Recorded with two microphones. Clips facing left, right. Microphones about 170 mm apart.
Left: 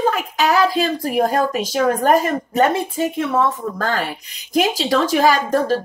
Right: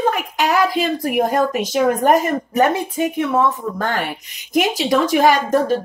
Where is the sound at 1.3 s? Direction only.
20° right (ahead or behind).